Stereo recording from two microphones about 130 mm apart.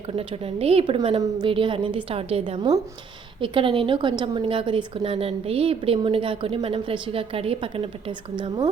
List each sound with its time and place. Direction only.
0.2 s a woman's voice: 50° right (ahead or behind)